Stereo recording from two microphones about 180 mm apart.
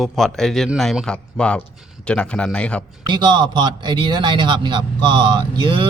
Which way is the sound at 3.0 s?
25° right (ahead or behind).